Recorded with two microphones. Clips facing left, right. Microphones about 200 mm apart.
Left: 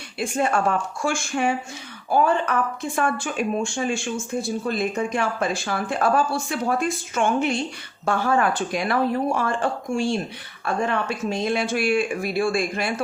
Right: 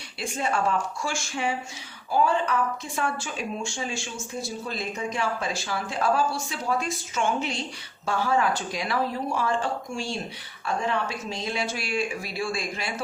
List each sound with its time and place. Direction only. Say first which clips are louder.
0.2 s speech: left 5 dB; 50° left (ahead or behind)